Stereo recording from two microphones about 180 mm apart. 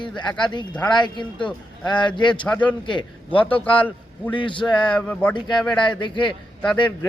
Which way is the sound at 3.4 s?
10° left (ahead or behind).